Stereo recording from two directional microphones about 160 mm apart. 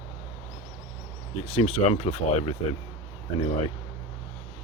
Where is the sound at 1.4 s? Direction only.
40° left (ahead or behind).